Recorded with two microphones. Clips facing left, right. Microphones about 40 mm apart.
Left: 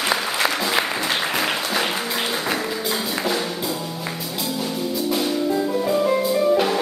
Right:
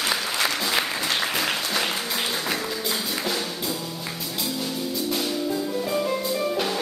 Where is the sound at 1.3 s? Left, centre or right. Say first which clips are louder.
Left 3 dB; centre.